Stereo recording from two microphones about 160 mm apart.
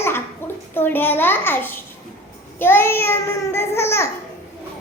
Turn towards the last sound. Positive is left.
turn(degrees=15)  # may be behind; listen again after turning